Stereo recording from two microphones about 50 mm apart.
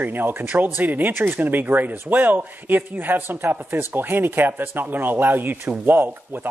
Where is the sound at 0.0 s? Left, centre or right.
Right.